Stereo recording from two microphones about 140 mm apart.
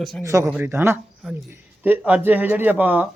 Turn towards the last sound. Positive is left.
turn(degrees=-10)  # may be behind; listen again after turning